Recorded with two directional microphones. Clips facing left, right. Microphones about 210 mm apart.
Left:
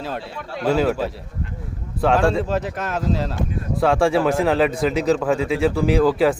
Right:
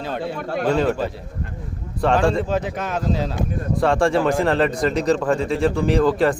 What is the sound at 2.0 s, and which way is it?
A man's voice, centre (ahead or behind).